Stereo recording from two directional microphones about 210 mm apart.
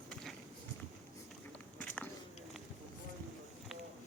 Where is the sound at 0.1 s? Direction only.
5° left (ahead or behind).